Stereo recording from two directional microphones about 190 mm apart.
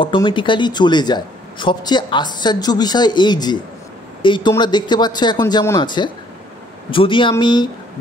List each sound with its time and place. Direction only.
0.0 s speech: 25° left (ahead or behind)